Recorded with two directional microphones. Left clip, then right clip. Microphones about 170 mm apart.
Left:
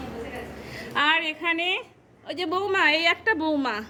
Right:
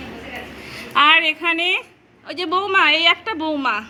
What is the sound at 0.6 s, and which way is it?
A woman's voice, centre (ahead or behind).